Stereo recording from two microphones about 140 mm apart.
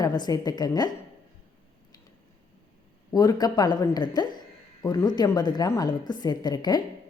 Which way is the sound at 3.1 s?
30° left (ahead or behind).